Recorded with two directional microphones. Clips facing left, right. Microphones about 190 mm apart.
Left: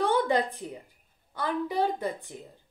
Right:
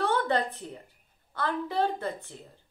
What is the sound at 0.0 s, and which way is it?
A woman's voice, 15° left (ahead or behind).